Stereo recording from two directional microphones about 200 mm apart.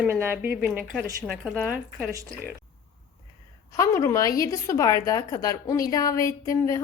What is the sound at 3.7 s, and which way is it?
A woman's voice, 15° left (ahead or behind).